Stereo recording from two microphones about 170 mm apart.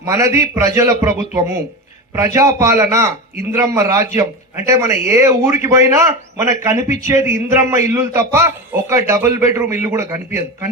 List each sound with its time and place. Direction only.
0.0 s a man's voice: 15° right (ahead or behind)